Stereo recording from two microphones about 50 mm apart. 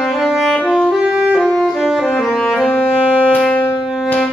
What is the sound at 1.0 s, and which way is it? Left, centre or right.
Music, right.